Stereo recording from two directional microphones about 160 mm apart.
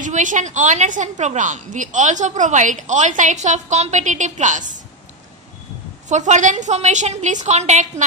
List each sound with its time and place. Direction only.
0.0 s a woman's voice: 55° right (ahead or behind)
6.0 s a woman's voice: 50° right (ahead or behind)